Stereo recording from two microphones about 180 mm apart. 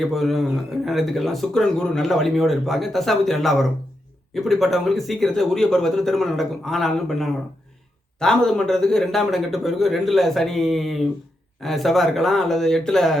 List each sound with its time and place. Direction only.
0.0 s speech: centre (ahead or behind)